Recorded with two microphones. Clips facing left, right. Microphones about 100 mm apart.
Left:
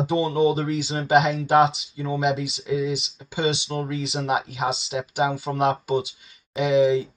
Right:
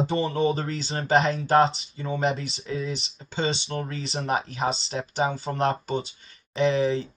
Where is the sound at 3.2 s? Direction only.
10° left (ahead or behind).